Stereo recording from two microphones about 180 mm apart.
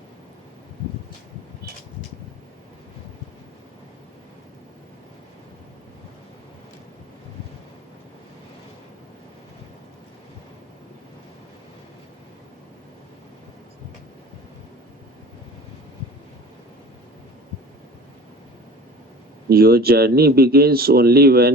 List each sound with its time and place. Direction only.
19.5 s speech: 60° right (ahead or behind)